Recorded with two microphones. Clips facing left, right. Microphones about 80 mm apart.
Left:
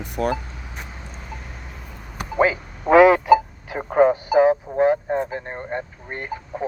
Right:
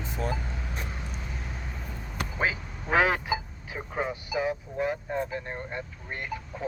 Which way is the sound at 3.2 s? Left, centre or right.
Left.